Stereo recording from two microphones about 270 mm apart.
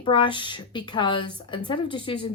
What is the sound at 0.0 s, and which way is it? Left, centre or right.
A woman's voice, centre.